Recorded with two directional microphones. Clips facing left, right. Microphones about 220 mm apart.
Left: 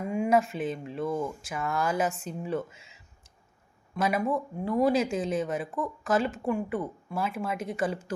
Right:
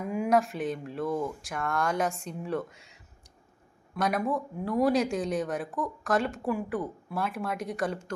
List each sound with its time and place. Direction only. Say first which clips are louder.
0.0 s speech: left 1 dB; 5° right (ahead or behind)